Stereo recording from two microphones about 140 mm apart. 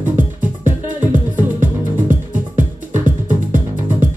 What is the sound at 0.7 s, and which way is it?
Music, 10° right (ahead or behind).